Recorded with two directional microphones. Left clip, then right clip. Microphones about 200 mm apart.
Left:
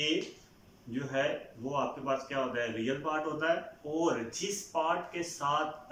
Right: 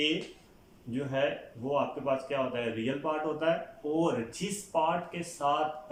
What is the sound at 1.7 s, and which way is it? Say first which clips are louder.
A man's voice: right 3 dB; 20° right (ahead or behind).